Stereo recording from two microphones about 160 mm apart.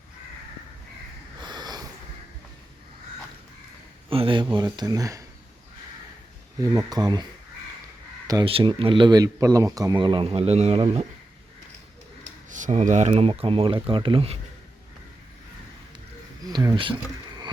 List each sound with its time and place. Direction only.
1.4 s sniff: 25° right (ahead or behind)
4.1 s speech: 35° right (ahead or behind)
6.9 s speech: 25° right (ahead or behind)
8.4 s speech: 35° right (ahead or behind)
12.2 s speech: 50° right (ahead or behind); by 14.3 s 35° right (ahead or behind)
16.4 s a sound: 25° right (ahead or behind)